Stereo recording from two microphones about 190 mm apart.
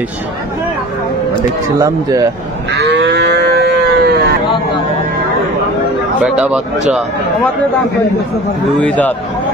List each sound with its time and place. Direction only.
1.8 s speech: 20° right (ahead or behind)
2.7 s livestock: 65° right (ahead or behind)
6.2 s speech: 5° right (ahead or behind)
8.8 s a man's voice: 5° left (ahead or behind)